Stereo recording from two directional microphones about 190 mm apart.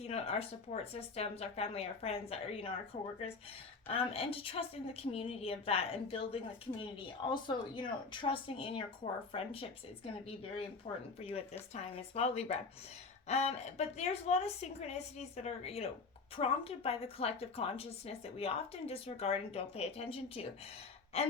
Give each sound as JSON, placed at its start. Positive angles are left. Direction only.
{"t": 0.0, "sound": "a woman's voice", "side_deg": 35}